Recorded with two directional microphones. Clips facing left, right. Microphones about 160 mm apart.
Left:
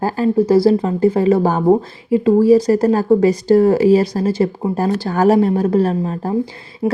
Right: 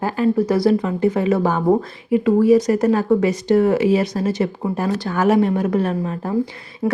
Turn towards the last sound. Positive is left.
turn(degrees=35)  # may be behind; listen again after turning